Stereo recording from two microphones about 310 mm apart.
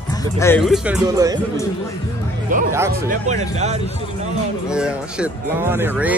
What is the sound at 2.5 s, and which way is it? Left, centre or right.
Speech, right.